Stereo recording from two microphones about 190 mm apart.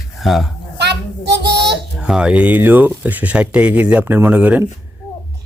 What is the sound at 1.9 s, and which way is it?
Speech, 5° right (ahead or behind).